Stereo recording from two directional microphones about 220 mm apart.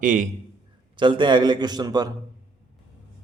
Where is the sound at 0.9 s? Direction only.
20° right (ahead or behind).